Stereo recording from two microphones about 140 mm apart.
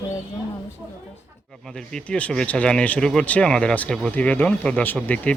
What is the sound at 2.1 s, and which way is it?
Speech, 5° left (ahead or behind).